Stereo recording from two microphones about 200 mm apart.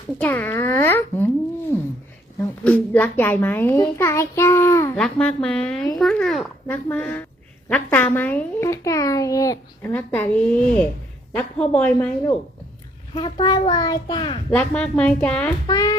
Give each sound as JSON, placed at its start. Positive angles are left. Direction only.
{"t": 0.2, "sound": "a child's voice", "side_deg": 10}
{"t": 1.7, "sound": "a sound", "side_deg": 10}
{"t": 2.6, "sound": "a child's voice", "side_deg": 10}
{"t": 13.4, "sound": "a child's voice", "side_deg": 25}
{"t": 14.5, "sound": "a child's voice", "side_deg": 5}
{"t": 15.6, "sound": "a child's voice", "side_deg": 20}